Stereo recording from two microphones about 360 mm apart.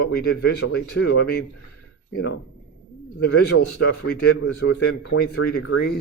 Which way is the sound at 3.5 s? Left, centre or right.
Left.